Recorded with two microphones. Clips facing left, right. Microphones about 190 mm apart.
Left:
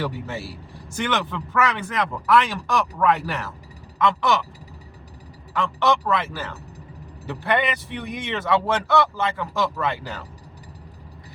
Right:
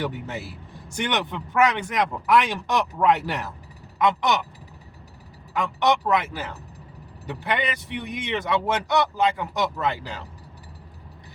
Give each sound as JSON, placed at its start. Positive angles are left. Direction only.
{"t": 0.0, "sound": "speech", "side_deg": -20}
{"t": 5.5, "sound": "speech", "side_deg": -20}